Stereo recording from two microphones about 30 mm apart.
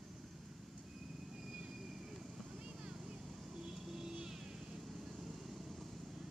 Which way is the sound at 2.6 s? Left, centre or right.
Right.